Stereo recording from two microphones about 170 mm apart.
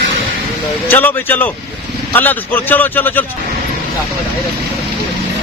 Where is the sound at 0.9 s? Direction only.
10° left (ahead or behind).